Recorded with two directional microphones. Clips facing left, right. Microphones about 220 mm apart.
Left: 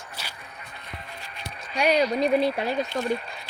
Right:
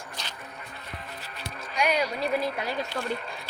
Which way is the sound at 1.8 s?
35° left (ahead or behind).